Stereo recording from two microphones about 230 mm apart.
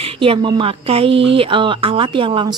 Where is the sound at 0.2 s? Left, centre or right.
Right.